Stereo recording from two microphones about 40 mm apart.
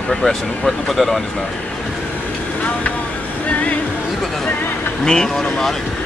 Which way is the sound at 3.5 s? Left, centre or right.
Left.